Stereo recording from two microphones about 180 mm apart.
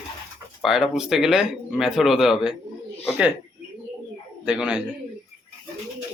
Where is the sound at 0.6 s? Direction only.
Centre (ahead or behind).